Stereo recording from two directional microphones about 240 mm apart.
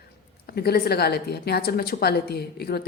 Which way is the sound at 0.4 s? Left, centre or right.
Left.